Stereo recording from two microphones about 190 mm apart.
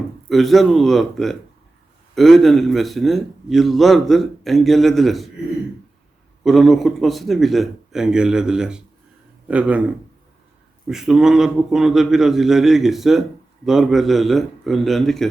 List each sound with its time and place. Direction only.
0.3 s a man's voice: centre (ahead or behind)
6.4 s a man's voice: centre (ahead or behind)